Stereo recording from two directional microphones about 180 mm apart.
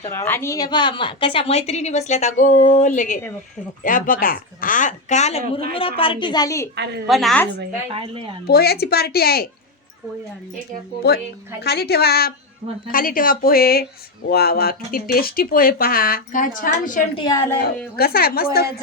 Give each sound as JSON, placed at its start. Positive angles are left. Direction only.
{"t": 0.0, "sound": "a woman's voice", "side_deg": 15}
{"t": 6.0, "sound": "a woman's voice", "side_deg": 30}
{"t": 7.1, "sound": "a woman's voice", "side_deg": 0}
{"t": 7.9, "sound": "speech", "side_deg": -30}
{"t": 8.4, "sound": "speech", "side_deg": 60}
{"t": 11.0, "sound": "speech", "side_deg": 65}
{"t": 12.9, "sound": "speech", "side_deg": 50}
{"t": 17.2, "sound": "a woman's voice", "side_deg": 20}
{"t": 17.9, "sound": "speech", "side_deg": 60}